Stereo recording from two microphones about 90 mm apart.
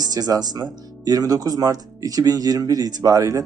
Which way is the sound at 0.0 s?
45° right (ahead or behind).